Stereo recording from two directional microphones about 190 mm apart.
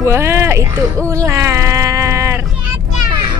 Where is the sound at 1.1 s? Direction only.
15° right (ahead or behind).